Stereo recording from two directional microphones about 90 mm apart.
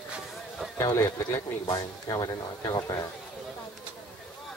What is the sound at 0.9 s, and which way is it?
Speech, 30° left (ahead or behind).